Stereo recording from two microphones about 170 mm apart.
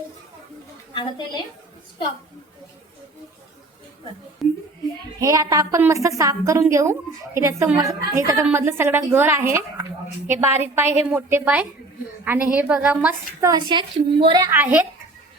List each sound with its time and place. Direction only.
4.4 s speech: centre (ahead or behind)
5.2 s a woman's voice: 20° right (ahead or behind)
13.5 s a woman's voice: 25° right (ahead or behind); by 14.8 s 10° right (ahead or behind)